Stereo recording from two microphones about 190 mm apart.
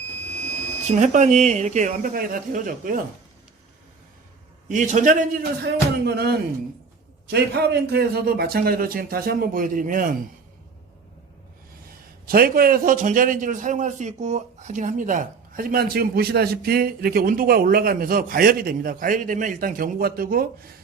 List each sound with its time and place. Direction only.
0.9 s speech: 40° right (ahead or behind)
4.7 s speech: 40° right (ahead or behind)
5.6 s music: 60° right (ahead or behind)
7.3 s a man's voice: 60° right (ahead or behind)
12.3 s a man's voice: 50° right (ahead or behind)